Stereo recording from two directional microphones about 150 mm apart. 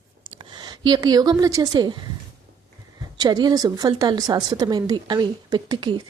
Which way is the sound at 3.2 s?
30° right (ahead or behind).